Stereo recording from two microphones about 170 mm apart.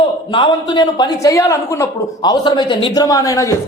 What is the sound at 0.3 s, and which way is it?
A woman's voice, 30° left (ahead or behind).